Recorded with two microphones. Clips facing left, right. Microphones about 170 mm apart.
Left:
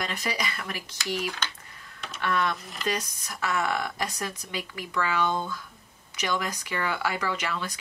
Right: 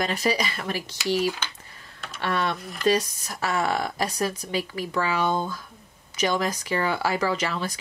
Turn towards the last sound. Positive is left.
turn(degrees=-30)  # may be behind; listen again after turning